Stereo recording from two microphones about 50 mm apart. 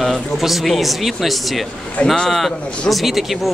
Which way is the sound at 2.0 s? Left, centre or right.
Centre.